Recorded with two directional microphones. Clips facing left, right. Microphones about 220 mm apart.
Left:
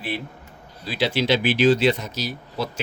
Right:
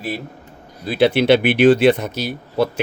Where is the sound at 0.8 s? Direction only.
55° right (ahead or behind).